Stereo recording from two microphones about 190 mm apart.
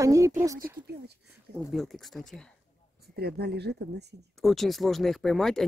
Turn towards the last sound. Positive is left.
turn(degrees=0)  # may be behind; listen again after turning